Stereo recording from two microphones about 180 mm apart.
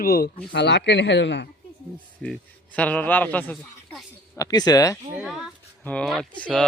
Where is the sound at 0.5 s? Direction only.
75° left (ahead or behind).